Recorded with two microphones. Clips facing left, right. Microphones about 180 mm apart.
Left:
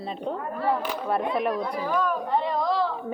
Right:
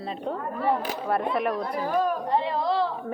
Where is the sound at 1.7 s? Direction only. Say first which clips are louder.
Right 1 dB; 50° right (ahead or behind).